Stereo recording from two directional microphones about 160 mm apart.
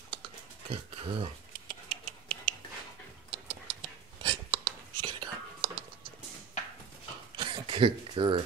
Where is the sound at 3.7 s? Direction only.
35° right (ahead or behind).